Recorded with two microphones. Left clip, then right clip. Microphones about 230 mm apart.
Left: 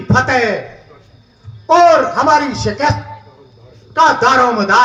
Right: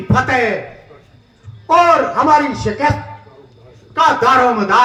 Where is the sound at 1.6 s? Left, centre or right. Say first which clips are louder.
Left 2 dB; left.